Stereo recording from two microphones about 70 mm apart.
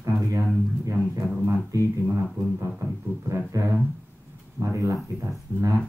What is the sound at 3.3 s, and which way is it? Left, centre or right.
Speech, right.